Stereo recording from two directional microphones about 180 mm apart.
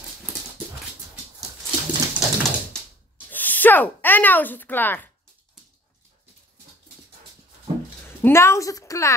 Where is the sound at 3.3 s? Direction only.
10° left (ahead or behind).